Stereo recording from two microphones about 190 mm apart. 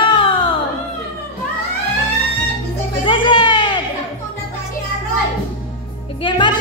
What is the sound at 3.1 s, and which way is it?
Music, 25° left (ahead or behind).